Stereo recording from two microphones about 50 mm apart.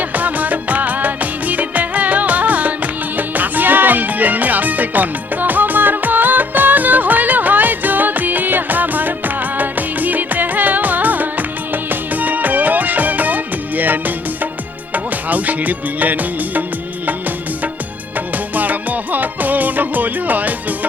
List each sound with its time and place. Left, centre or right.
0.1 s music of bollywood: right
14.9 s music: right
18.5 s music: right